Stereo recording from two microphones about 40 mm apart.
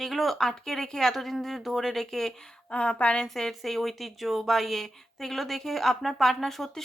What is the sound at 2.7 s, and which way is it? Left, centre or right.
Speech, left.